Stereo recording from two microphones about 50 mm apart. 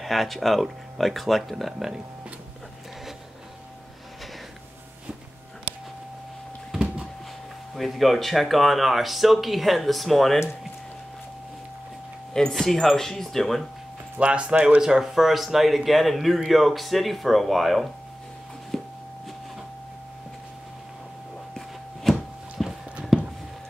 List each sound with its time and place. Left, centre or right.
0.0 s speech: centre
7.7 s speech: centre
12.4 s speech: centre
14.2 s speech: right
14.8 s speech: centre
18.7 s a sound: centre
22.1 s a sound: centre